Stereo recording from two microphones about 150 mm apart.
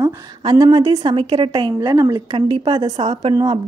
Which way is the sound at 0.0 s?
30° right (ahead or behind).